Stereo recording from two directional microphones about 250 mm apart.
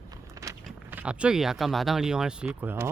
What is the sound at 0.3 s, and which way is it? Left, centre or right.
Speech, centre.